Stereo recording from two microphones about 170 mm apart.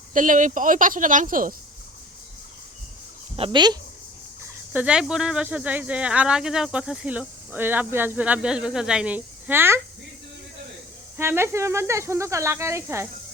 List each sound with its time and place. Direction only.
0.1 s a woman's voice: 50° right (ahead or behind)
3.3 s speech: 30° right (ahead or behind)
4.7 s speech: 5° right (ahead or behind)
11.2 s speech: 15° right (ahead or behind)